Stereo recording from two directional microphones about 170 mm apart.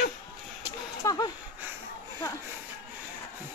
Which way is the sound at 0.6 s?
20° left (ahead or behind).